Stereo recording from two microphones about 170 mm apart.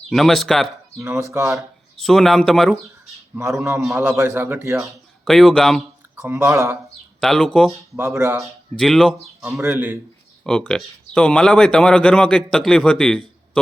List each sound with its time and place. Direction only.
0.1 s speech: centre (ahead or behind)
0.9 s a man's voice: 15° right (ahead or behind)
1.5 s speech: centre (ahead or behind)
3.3 s a man's voice: 15° right (ahead or behind)
4.9 s speech: centre (ahead or behind)
6.2 s a man's voice: 15° right (ahead or behind)
7.2 s speech: 5° left (ahead or behind)
7.9 s a man's voice: 15° right (ahead or behind)
8.7 s speech: centre (ahead or behind)
9.6 s a man's voice: 15° right (ahead or behind)
10.4 s speech: 5° left (ahead or behind)